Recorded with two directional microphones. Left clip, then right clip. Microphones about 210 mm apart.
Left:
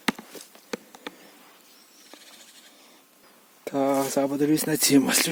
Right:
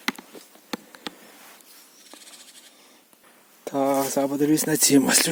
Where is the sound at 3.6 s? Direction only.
Centre (ahead or behind).